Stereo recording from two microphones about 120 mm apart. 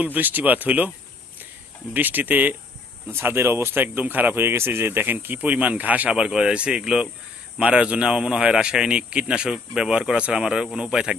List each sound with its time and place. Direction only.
0.0 s speech: 15° right (ahead or behind)
1.9 s speech: 15° right (ahead or behind)